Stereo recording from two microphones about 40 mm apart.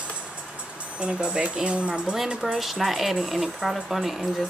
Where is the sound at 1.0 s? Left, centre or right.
Right.